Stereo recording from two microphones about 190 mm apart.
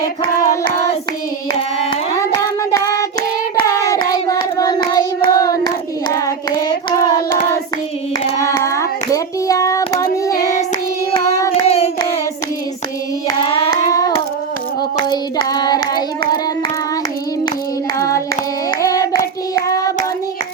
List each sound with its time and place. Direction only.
0.2 s child singing: 20° left (ahead or behind)
1.9 s child singing: 20° left (ahead or behind)
8.4 s child singing: 15° left (ahead or behind)
11.1 s hands: 15° left (ahead or behind)
11.5 s hands: 30° left (ahead or behind)
13.2 s hands: 20° left (ahead or behind)
15.1 s child singing: 20° left (ahead or behind)
18.8 s hands: 15° left (ahead or behind)